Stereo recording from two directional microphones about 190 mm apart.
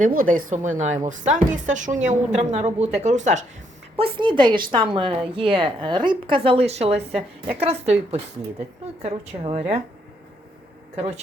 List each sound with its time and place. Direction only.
0.0 s speech: 45° right (ahead or behind)
3.9 s a woman's voice: 25° right (ahead or behind)
10.9 s speech: 35° right (ahead or behind)